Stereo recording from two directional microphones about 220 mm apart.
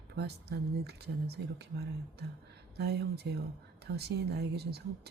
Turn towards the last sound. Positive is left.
turn(degrees=-50)  # may be behind; listen again after turning